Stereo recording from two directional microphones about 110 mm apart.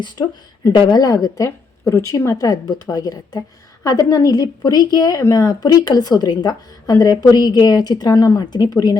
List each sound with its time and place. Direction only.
0.0 s a woman's voice: 40° left (ahead or behind)